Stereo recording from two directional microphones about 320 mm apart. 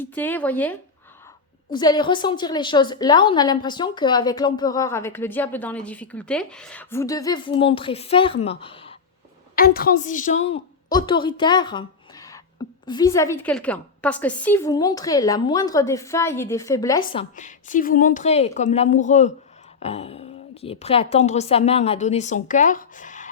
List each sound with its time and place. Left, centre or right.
0.0 s a woman's voice: centre
9.6 s a woman's voice: left